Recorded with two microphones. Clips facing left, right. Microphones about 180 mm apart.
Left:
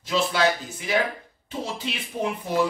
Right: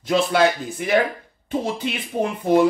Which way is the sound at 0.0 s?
55° right (ahead or behind).